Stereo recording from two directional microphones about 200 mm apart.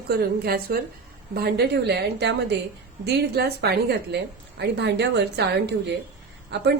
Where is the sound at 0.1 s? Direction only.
50° right (ahead or behind).